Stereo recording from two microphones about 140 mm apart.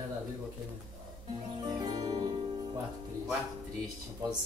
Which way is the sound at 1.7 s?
30° right (ahead or behind).